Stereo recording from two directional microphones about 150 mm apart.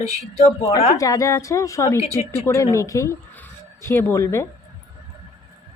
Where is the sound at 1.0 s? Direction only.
20° left (ahead or behind).